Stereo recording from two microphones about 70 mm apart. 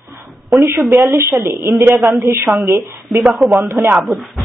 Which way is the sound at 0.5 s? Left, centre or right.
Right.